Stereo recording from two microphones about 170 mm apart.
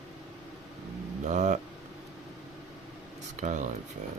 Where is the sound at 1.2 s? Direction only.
45° right (ahead or behind).